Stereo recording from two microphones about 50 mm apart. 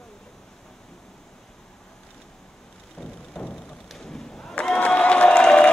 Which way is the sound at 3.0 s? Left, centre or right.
Centre.